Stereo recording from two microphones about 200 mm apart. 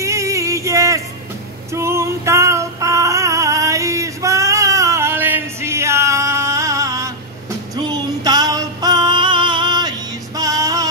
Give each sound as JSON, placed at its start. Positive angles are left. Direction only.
{"t": 0.0, "sound": "music", "side_deg": -15}
{"t": 1.7, "sound": "female singing", "side_deg": -15}